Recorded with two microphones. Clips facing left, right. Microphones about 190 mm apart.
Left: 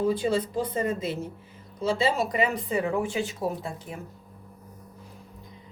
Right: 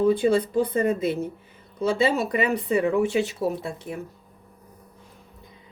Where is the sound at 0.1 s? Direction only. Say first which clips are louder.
Right 5 dB; 60° right (ahead or behind).